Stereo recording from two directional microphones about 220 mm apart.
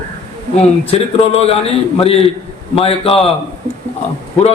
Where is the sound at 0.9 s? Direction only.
25° left (ahead or behind).